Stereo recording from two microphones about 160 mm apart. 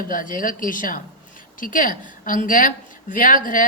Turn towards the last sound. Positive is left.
turn(degrees=55)  # may be behind; listen again after turning